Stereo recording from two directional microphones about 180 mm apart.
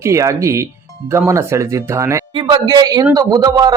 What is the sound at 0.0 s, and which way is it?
A man's voice, 15° right (ahead or behind).